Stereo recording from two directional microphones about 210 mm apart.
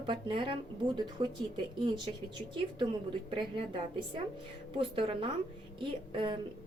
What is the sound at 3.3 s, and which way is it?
A woman's voice, 25° right (ahead or behind).